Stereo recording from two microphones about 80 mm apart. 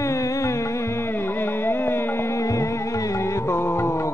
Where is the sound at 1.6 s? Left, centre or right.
Left.